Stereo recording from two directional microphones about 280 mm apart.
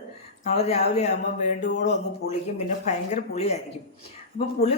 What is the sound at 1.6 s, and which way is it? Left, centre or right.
Speech, left.